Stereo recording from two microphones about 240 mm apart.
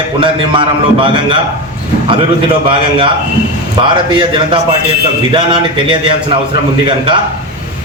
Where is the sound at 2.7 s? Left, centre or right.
Right.